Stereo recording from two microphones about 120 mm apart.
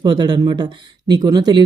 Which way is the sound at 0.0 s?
35° right (ahead or behind).